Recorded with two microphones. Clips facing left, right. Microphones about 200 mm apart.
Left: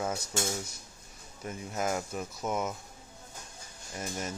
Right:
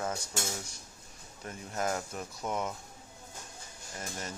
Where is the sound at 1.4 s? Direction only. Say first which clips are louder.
Left 1 dB; 10° left (ahead or behind).